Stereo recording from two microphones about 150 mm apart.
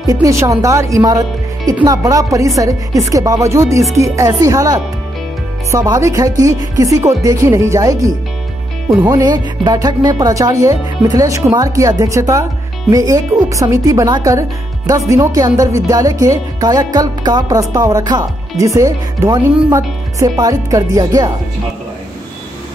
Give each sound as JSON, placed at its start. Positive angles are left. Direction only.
{"t": 0.0, "sound": "speech", "side_deg": -20}